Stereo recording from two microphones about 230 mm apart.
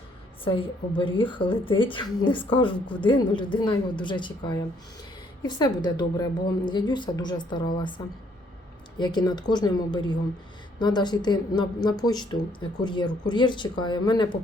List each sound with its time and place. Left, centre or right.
0.4 s a woman's voice: left